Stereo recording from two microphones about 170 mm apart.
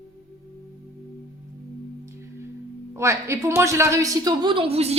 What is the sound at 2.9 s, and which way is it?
A woman's voice, 15° right (ahead or behind).